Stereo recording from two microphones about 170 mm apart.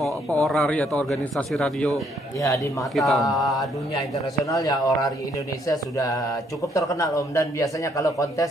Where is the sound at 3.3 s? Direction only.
20° left (ahead or behind).